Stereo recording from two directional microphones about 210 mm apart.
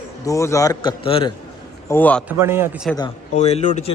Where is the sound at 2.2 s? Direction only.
10° right (ahead or behind).